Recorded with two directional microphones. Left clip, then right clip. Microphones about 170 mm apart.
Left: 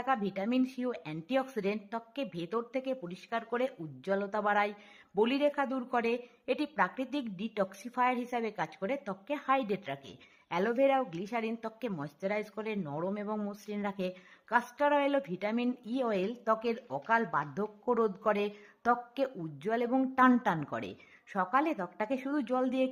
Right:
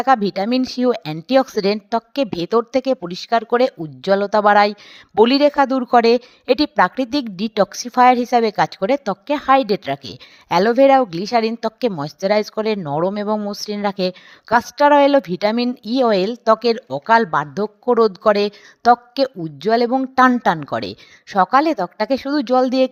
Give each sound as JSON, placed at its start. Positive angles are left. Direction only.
{"t": 0.0, "sound": "a woman's voice", "side_deg": -45}